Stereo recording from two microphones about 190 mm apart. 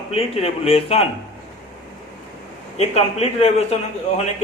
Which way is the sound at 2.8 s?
35° left (ahead or behind).